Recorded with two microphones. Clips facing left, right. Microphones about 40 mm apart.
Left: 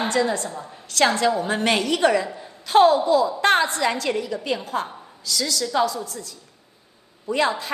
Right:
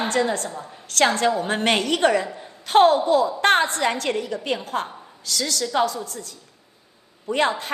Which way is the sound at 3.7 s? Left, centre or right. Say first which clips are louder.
Even; right.